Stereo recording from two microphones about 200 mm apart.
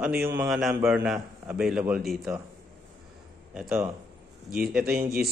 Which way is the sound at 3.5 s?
5° right (ahead or behind).